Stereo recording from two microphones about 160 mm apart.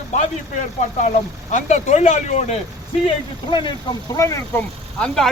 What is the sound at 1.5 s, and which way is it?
Speech, 45° left (ahead or behind).